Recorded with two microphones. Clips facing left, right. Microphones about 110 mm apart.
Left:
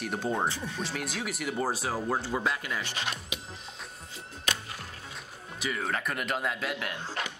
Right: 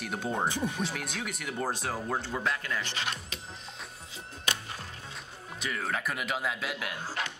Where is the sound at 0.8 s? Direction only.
Centre (ahead or behind).